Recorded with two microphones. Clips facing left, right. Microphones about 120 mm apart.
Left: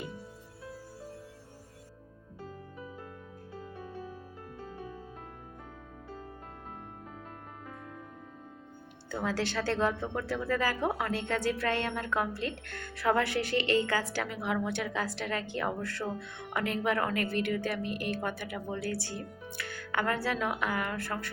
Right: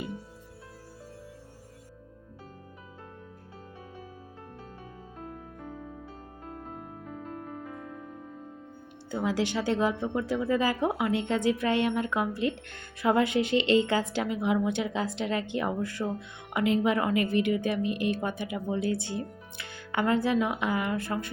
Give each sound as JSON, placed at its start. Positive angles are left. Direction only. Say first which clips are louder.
{"t": 9.0, "sound": "speech", "louder": "right 4 dB", "side_deg": -15}